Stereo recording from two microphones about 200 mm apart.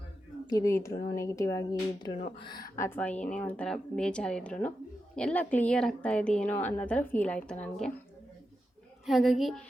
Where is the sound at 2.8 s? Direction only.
10° left (ahead or behind).